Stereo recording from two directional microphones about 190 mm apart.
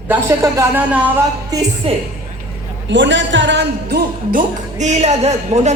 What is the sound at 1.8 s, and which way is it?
Speech, 30° right (ahead or behind).